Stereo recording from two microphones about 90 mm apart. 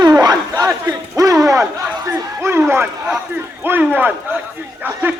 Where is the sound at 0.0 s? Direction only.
50° right (ahead or behind); by 2.9 s 25° right (ahead or behind).